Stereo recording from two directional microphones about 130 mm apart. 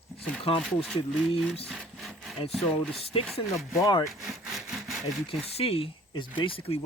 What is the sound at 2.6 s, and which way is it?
Speech, centre (ahead or behind).